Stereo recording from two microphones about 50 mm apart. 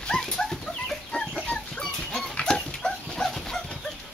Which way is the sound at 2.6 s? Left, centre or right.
Centre.